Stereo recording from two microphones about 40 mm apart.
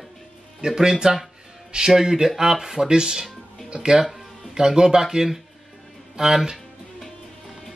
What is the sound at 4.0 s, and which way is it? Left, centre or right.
Music, centre.